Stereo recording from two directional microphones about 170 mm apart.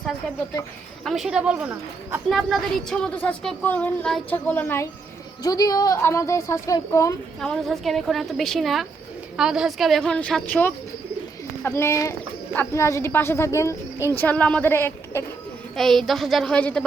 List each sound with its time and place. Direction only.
1.0 s speech: centre (ahead or behind)
2.3 s a woman's voice: centre (ahead or behind); by 7.2 s 20° left (ahead or behind)
7.3 s a woman's voice: centre (ahead or behind)
15.7 s a woman's voice: centre (ahead or behind)